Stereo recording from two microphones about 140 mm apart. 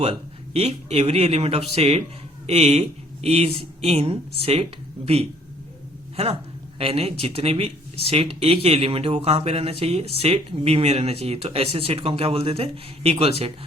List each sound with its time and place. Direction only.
0.0 s speech: 45° right (ahead or behind)
6.7 s speech: 45° right (ahead or behind)